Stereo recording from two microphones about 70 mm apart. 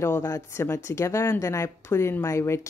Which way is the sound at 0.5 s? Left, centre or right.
Left.